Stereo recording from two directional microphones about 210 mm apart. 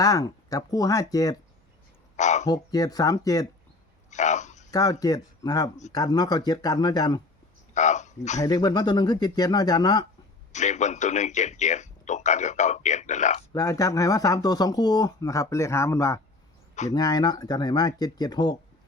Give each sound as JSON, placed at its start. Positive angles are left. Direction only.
{"t": 0.0, "sound": "speech", "side_deg": 15}
{"t": 2.1, "sound": "a sound", "side_deg": 35}
{"t": 2.5, "sound": "speech", "side_deg": 15}
{"t": 4.1, "sound": "a sound", "side_deg": 35}
{"t": 4.7, "sound": "speech", "side_deg": 15}
{"t": 7.7, "sound": "a sound", "side_deg": 35}
{"t": 8.4, "sound": "speech", "side_deg": 20}
{"t": 10.5, "sound": "a man's voice", "side_deg": 35}
{"t": 13.5, "sound": "speech", "side_deg": 15}